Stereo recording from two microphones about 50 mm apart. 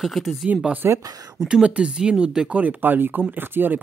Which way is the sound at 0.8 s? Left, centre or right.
Right.